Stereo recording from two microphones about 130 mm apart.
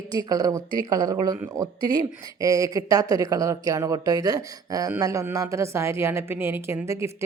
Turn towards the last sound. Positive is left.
turn(degrees=-20)  # may be behind; listen again after turning